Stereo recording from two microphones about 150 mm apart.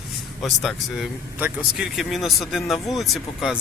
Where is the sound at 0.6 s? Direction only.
Centre (ahead or behind).